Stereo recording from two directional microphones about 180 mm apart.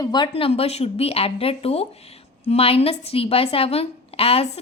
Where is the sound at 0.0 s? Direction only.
25° left (ahead or behind).